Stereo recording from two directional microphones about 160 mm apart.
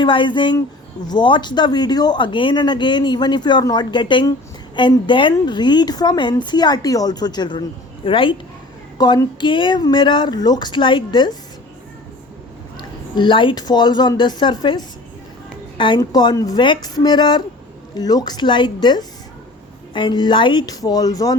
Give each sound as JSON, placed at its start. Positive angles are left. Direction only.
{"t": 0.0, "sound": "speech", "side_deg": 30}
{"t": 13.1, "sound": "speech", "side_deg": 30}